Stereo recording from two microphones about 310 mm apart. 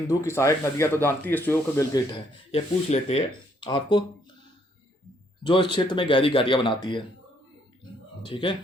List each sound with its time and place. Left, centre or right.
0.1 s speech: centre
2.5 s speech: centre
5.4 s speech: centre
8.2 s speech: centre